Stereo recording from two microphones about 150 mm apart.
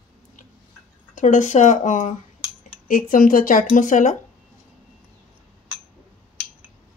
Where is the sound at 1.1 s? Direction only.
55° left (ahead or behind).